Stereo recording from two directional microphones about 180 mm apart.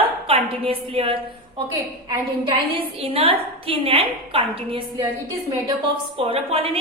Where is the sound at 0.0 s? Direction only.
30° right (ahead or behind).